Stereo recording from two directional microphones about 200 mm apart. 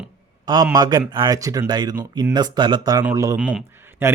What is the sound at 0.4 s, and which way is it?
Speech, 20° right (ahead or behind).